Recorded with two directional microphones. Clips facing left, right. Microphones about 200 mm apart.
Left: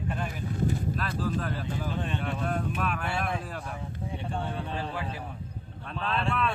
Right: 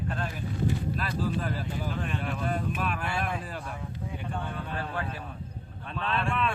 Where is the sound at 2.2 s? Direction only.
Centre (ahead or behind).